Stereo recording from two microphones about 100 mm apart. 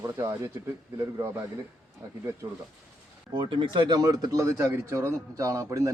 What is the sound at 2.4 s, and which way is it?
Speech, 40° right (ahead or behind).